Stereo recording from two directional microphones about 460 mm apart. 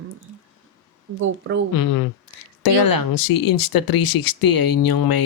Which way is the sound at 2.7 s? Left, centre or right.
Left.